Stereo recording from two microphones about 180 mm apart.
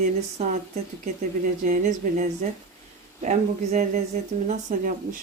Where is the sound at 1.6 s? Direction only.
45° right (ahead or behind).